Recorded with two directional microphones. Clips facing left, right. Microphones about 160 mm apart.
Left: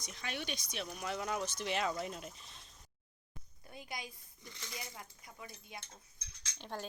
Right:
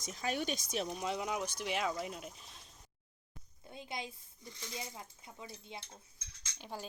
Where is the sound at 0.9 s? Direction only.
20° right (ahead or behind).